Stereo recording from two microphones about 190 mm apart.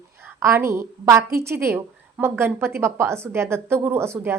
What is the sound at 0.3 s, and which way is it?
A woman's voice, 15° right (ahead or behind).